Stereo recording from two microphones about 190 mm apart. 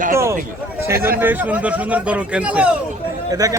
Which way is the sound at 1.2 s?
10° right (ahead or behind).